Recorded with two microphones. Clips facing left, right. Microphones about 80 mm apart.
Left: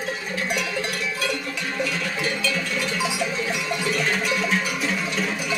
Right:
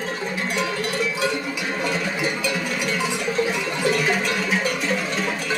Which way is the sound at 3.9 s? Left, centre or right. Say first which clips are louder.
Right 1 dB; centre.